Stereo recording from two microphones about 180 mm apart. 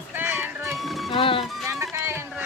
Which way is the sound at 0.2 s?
10° right (ahead or behind).